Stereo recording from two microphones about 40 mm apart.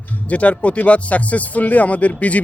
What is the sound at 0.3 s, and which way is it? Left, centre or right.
A man's voice, left.